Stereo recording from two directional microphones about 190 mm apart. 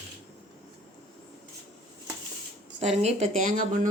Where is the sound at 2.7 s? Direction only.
35° right (ahead or behind).